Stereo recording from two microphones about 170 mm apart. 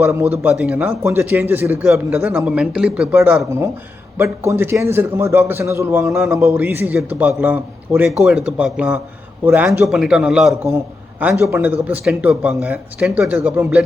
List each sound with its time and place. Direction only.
0.0 s a man's voice: 15° right (ahead or behind)